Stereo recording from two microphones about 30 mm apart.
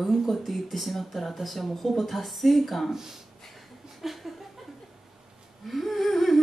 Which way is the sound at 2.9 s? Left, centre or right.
Centre.